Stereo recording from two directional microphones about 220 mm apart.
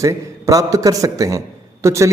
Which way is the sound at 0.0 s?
15° right (ahead or behind).